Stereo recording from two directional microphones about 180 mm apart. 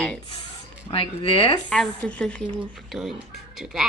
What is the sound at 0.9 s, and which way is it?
Speech, 30° left (ahead or behind).